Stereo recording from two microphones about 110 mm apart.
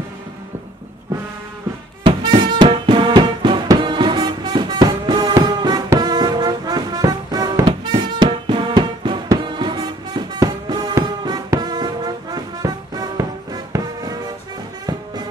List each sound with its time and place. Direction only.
2.0 s music: 50° right (ahead or behind)
7.6 s music: 45° right (ahead or behind)